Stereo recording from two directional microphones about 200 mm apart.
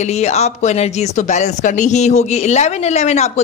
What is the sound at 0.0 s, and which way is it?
Speech, 35° left (ahead or behind).